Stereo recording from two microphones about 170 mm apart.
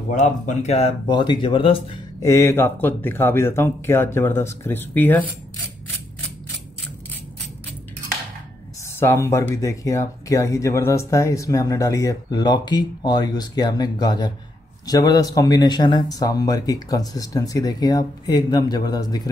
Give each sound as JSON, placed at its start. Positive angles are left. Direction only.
{"t": 0.1, "sound": "speech", "side_deg": 45}
{"t": 2.2, "sound": "speech", "side_deg": 15}
{"t": 9.0, "sound": "speech", "side_deg": 15}